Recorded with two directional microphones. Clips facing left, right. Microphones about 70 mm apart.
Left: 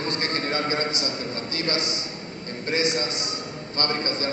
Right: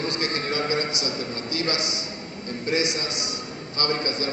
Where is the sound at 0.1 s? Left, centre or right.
Left.